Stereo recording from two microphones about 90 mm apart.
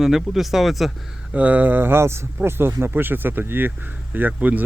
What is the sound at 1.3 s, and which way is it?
Speech, 15° right (ahead or behind).